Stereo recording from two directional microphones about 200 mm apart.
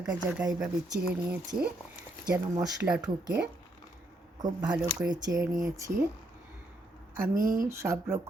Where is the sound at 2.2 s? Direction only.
20° right (ahead or behind).